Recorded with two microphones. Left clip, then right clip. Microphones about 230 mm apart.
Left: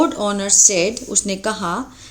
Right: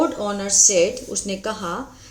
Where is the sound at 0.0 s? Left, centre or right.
Left.